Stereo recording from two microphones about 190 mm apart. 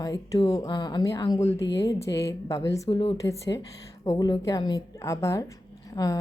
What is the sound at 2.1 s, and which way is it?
A woman's voice, 15° left (ahead or behind).